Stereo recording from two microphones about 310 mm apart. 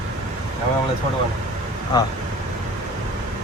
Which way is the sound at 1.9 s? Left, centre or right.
Centre.